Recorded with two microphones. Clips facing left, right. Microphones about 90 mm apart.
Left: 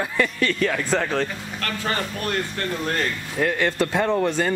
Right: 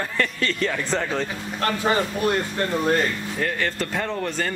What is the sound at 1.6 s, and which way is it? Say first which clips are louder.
Speech: right 5 dB; 15° right (ahead or behind).